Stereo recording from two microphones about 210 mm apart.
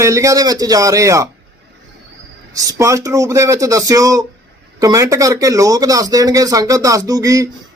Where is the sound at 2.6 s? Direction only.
15° right (ahead or behind).